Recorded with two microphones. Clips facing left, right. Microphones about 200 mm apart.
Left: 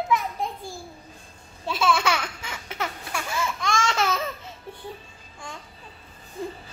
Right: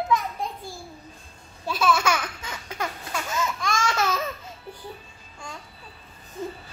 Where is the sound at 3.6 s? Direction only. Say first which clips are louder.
Left 2 dB; 25° left (ahead or behind).